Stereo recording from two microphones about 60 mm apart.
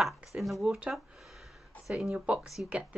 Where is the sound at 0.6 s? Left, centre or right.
Centre.